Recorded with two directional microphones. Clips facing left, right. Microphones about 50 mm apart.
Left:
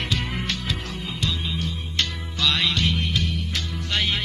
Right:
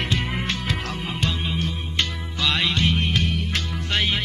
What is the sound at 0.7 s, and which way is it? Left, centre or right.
Music, right.